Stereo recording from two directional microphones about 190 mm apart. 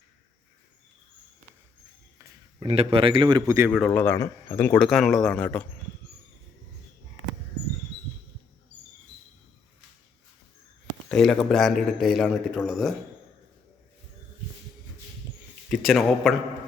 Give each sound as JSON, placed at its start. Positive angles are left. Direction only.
{"t": 2.6, "sound": "a man's voice", "side_deg": -30}
{"t": 3.7, "sound": "speech", "side_deg": 5}
{"t": 11.1, "sound": "a man's voice", "side_deg": 0}
{"t": 15.7, "sound": "a man's voice", "side_deg": 0}